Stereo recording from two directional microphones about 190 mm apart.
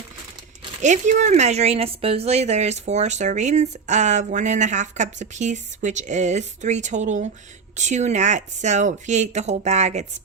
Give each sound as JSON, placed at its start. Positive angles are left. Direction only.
{"t": 0.8, "sound": "a woman's voice", "side_deg": -40}